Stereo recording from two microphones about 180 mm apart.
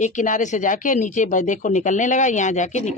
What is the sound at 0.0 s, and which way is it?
Speech, 45° left (ahead or behind).